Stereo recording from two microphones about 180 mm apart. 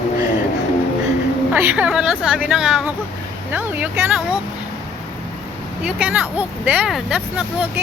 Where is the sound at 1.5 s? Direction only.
10° right (ahead or behind).